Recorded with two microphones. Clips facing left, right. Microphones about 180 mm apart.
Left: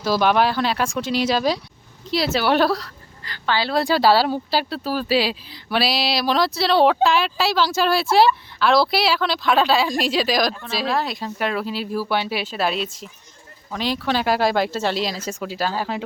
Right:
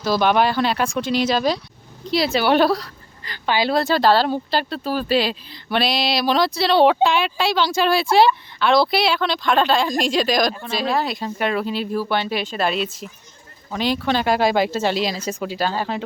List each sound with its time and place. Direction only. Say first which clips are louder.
0.0 s speech: right 1 dB; 5° left (ahead or behind)
3.2 s a woman's voice: right 3 dB; 15° right (ahead or behind)
3.8 s speech: left 1 dB; 5° left (ahead or behind)